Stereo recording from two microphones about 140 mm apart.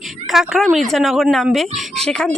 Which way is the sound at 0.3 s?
Centre (ahead or behind).